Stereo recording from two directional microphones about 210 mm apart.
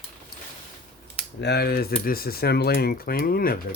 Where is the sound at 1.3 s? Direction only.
50° left (ahead or behind).